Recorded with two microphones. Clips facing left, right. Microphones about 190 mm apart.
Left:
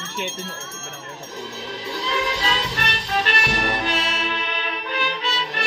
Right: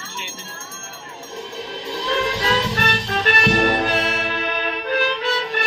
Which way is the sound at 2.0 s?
50° right (ahead or behind).